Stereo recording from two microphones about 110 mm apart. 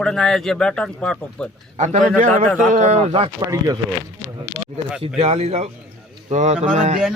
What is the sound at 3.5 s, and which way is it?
Speech, 35° right (ahead or behind).